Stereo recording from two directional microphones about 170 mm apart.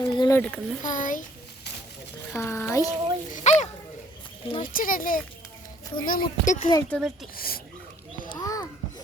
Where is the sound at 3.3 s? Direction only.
45° left (ahead or behind).